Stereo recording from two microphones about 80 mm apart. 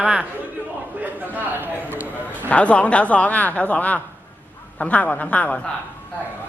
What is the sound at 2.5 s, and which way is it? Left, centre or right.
Speech, centre.